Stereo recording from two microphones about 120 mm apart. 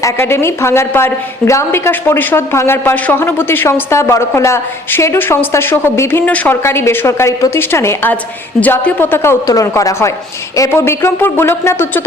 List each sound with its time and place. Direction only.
0.0 s a woman's voice: 20° left (ahead or behind)